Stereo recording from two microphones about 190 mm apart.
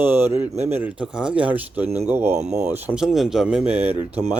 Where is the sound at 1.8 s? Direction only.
35° right (ahead or behind).